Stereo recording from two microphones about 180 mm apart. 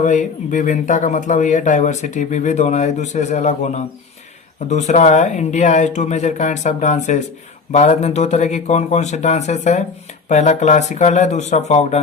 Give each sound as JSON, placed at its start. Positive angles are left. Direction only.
{"t": 0.0, "sound": "speech", "side_deg": 40}